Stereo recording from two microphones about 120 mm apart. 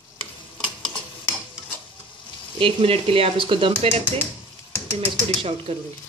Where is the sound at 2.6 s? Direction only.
50° right (ahead or behind).